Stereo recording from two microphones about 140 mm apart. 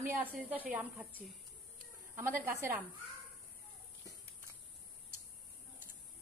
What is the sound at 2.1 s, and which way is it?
Speech, 15° right (ahead or behind).